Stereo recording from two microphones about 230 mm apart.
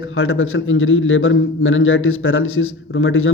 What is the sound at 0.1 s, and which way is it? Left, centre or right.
Speech, left.